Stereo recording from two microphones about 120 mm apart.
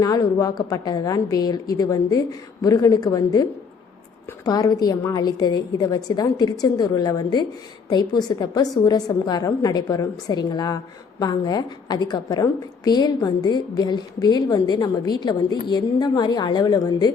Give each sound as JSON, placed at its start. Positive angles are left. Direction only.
{"t": 0.0, "sound": "a woman's voice", "side_deg": 30}
{"t": 4.4, "sound": "a woman's voice", "side_deg": 35}